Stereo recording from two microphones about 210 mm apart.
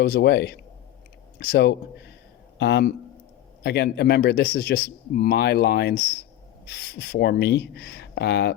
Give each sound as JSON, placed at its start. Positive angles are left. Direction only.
{"t": 0.0, "sound": "speech", "side_deg": 50}